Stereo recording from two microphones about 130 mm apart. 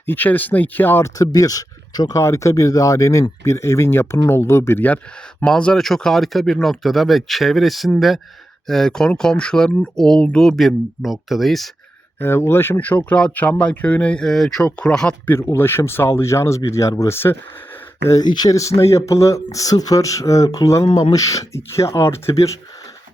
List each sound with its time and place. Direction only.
0.0 s speech: 15° left (ahead or behind)
12.2 s speech: 20° left (ahead or behind)
15.4 s speech: 20° left (ahead or behind)